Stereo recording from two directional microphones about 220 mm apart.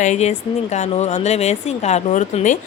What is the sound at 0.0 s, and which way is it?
Speech, 30° left (ahead or behind).